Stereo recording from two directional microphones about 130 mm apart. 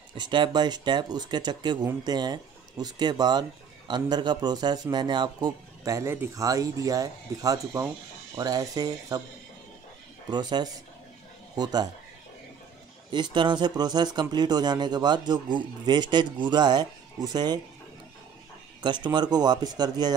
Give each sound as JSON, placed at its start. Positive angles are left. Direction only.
{"t": 0.2, "sound": "speech", "side_deg": -35}
{"t": 10.3, "sound": "speech", "side_deg": -35}
{"t": 13.1, "sound": "speech", "side_deg": -35}
{"t": 18.8, "sound": "speech", "side_deg": -35}